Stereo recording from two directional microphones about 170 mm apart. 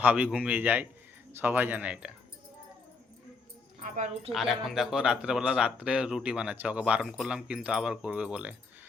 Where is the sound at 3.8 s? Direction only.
45° right (ahead or behind).